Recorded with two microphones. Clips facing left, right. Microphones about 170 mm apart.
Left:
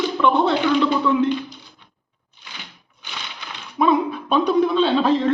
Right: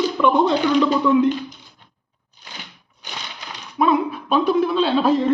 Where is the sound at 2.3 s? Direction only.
40° right (ahead or behind).